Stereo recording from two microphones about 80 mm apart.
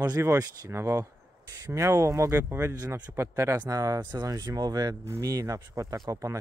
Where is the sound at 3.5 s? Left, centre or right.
Right.